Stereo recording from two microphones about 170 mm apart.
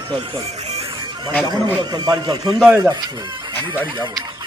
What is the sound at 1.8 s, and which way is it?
Speech, 25° right (ahead or behind).